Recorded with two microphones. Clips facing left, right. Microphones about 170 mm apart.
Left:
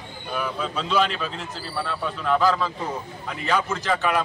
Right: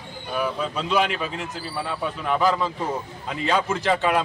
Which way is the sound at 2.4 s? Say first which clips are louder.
Even; 20° right (ahead or behind).